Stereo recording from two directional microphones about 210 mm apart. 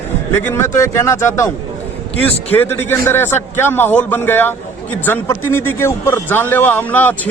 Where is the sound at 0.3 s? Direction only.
10° left (ahead or behind).